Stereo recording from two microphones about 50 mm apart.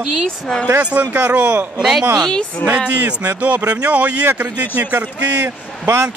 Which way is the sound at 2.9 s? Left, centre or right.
Right.